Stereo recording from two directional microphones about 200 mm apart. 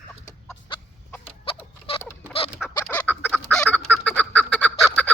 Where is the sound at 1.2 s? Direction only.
25° left (ahead or behind).